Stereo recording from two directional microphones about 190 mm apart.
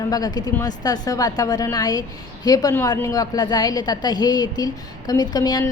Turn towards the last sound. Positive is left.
turn(degrees=20)  # may be behind; listen again after turning